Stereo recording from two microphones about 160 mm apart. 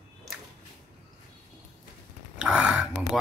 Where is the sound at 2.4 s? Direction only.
5° right (ahead or behind).